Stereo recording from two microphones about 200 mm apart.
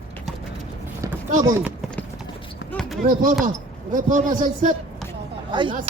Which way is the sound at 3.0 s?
45° right (ahead or behind).